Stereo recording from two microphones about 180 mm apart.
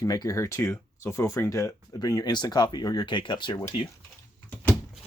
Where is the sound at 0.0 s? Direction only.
20° left (ahead or behind).